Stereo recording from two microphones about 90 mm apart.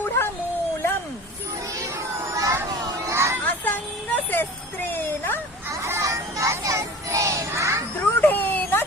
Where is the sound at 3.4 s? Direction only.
20° left (ahead or behind).